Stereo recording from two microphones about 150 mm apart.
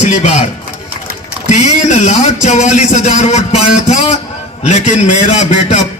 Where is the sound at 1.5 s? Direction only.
50° left (ahead or behind).